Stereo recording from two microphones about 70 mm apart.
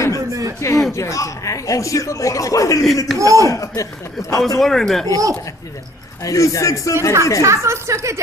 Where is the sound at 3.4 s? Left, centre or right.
Left.